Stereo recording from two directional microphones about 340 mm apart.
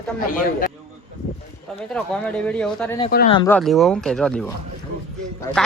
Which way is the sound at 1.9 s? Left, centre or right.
Centre.